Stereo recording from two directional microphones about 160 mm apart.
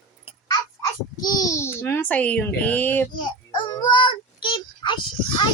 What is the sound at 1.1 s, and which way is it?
A child's voice, 25° left (ahead or behind).